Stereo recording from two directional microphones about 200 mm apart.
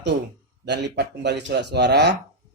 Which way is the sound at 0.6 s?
60° right (ahead or behind).